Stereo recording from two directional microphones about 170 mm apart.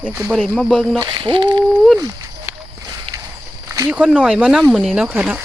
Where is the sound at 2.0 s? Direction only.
20° right (ahead or behind).